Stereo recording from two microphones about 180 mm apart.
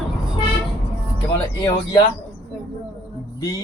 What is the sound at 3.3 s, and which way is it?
Music, 20° left (ahead or behind).